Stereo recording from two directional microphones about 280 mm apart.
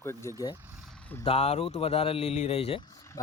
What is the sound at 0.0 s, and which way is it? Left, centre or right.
Speech, centre.